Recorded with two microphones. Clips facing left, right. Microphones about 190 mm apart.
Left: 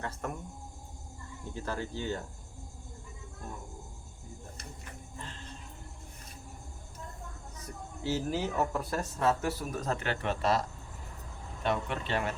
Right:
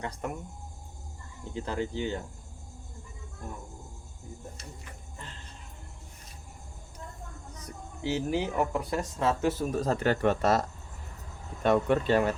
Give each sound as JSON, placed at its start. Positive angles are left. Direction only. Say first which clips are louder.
{"t": 0.2, "sound": "speech", "louder": "right 3 dB", "side_deg": -15}
{"t": 1.5, "sound": "speech", "louder": "right 5 dB", "side_deg": -20}
{"t": 8.0, "sound": "speech", "louder": "right 3 dB", "side_deg": -15}